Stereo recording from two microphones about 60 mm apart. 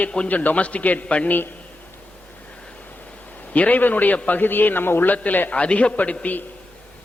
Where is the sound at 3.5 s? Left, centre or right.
Left.